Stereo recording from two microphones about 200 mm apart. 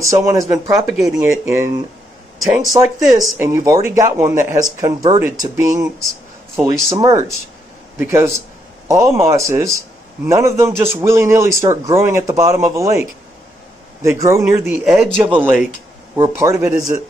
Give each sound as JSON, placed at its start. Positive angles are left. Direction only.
{"t": 0.2, "sound": "speech", "side_deg": -10}
{"t": 2.4, "sound": "speech", "side_deg": 0}
{"t": 2.8, "sound": "speech", "side_deg": -15}
{"t": 7.0, "sound": "speech", "side_deg": -15}
{"t": 14.0, "sound": "speech", "side_deg": -15}